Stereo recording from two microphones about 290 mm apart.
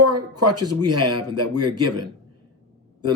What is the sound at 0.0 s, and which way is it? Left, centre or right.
Speech, right.